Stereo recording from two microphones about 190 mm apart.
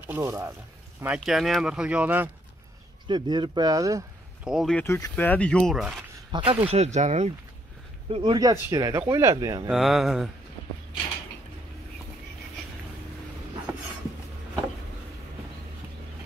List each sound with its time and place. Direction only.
0.0 s speech: 15° right (ahead or behind)
1.0 s speech: 5° right (ahead or behind)
3.1 s speech: 25° right (ahead or behind)
4.5 s speech: centre (ahead or behind)
4.8 s speech: 15° left (ahead or behind); by 6.0 s centre (ahead or behind)
6.3 s speech: 30° right (ahead or behind)
8.1 s speech: 25° right (ahead or behind)
9.7 s speech: centre (ahead or behind)